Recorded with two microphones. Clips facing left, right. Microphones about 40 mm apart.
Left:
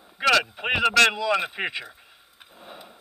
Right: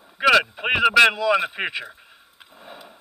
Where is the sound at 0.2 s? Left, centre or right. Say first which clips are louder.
Right 4 dB; centre.